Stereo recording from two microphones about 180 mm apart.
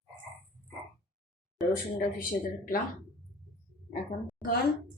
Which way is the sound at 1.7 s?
50° left (ahead or behind).